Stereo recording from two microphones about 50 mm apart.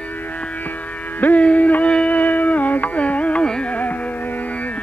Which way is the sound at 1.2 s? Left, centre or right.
Left.